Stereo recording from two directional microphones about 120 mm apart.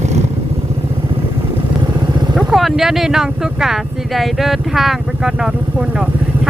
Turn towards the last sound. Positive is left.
turn(degrees=-5)  # may be behind; listen again after turning